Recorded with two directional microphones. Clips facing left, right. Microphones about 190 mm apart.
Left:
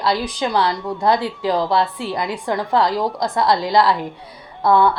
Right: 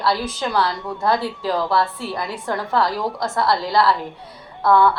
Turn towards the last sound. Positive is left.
turn(degrees=15)  # may be behind; listen again after turning